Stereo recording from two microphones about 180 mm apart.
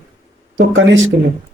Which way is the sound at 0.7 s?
90° right.